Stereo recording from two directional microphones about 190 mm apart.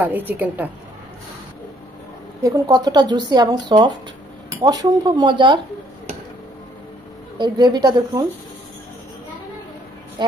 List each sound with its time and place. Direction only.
0.0 s a woman's voice: 10° right (ahead or behind)
2.4 s speech: 20° right (ahead or behind)
7.3 s speech: 25° right (ahead or behind)